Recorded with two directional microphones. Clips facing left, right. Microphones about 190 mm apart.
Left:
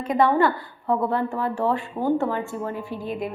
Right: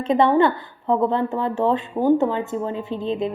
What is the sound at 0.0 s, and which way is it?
A woman's voice, 25° right (ahead or behind).